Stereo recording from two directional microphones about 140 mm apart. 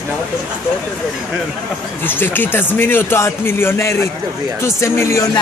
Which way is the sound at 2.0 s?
15° left (ahead or behind).